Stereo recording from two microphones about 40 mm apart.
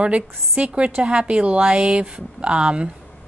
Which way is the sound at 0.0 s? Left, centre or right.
Right.